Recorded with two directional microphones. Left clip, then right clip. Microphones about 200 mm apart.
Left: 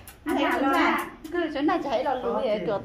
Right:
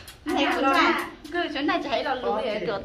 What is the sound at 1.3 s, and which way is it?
A woman's voice, 25° left (ahead or behind).